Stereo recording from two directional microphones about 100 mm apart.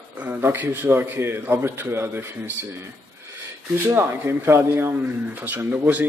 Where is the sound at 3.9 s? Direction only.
20° right (ahead or behind).